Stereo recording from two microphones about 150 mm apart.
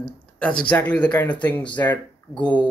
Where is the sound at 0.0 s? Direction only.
5° left (ahead or behind).